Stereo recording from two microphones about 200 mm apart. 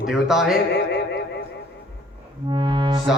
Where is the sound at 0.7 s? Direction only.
60° left (ahead or behind).